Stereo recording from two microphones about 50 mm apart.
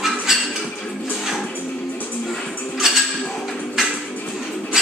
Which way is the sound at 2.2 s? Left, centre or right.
Centre.